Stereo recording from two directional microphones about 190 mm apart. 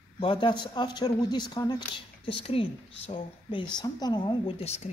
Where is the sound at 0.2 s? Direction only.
25° left (ahead or behind).